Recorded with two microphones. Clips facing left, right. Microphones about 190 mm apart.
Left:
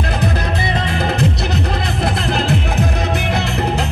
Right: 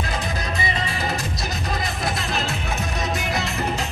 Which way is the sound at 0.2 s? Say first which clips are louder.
Left 7 dB; 65° left (ahead or behind).